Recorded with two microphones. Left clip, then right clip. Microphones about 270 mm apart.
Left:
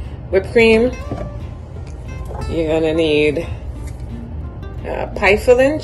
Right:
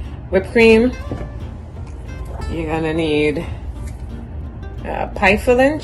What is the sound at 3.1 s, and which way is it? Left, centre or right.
Music, right.